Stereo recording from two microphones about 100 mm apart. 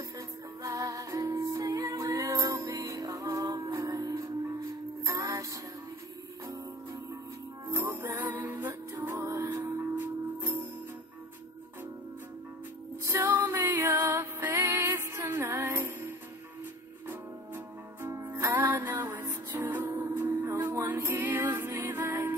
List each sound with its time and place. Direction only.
0.6 s music: 35° right (ahead or behind)
7.6 s music: 25° right (ahead or behind)
13.0 s music: 25° right (ahead or behind)
18.0 s music: 30° right (ahead or behind)